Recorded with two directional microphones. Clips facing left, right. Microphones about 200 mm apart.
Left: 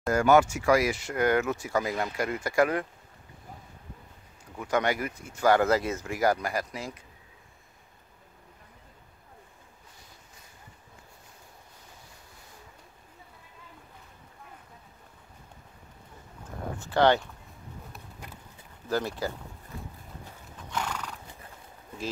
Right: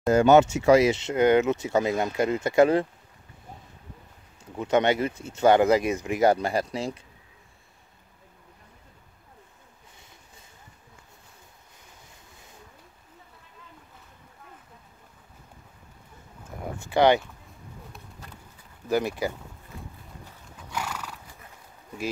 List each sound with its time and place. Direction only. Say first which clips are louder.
0.1 s speech: right 4 dB; 25° right (ahead or behind)
4.6 s speech: right 5 dB; 25° right (ahead or behind)
16.8 s speech: right 3 dB; 15° right (ahead or behind)
18.2 s run: left 2 dB; 15° left (ahead or behind)
18.9 s speech: right 4 dB; 15° right (ahead or behind)
20.7 s horse: even; 10° right (ahead or behind)